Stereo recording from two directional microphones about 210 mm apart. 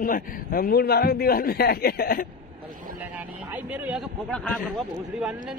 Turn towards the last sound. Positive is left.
turn(degrees=0)  # may be behind; listen again after turning